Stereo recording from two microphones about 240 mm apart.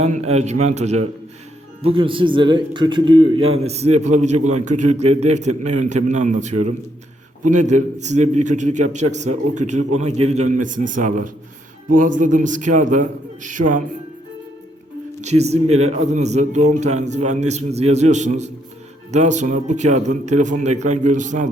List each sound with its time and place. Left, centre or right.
0.0 s a man's voice: right
15.2 s speech: right